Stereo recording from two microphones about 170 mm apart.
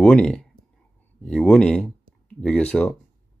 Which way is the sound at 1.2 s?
5° left (ahead or behind).